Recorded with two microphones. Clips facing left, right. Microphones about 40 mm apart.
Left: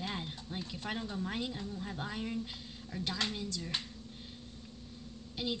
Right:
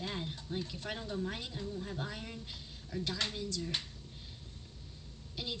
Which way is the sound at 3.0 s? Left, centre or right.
Left.